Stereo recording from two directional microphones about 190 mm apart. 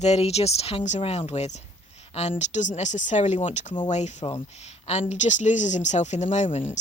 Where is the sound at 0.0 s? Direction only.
35° left (ahead or behind).